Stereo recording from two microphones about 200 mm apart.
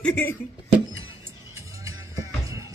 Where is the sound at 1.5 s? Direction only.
15° right (ahead or behind).